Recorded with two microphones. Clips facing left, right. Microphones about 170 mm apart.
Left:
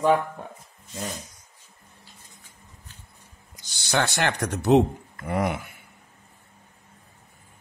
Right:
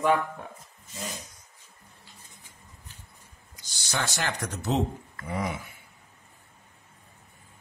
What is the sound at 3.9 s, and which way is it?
Speech, 65° left (ahead or behind).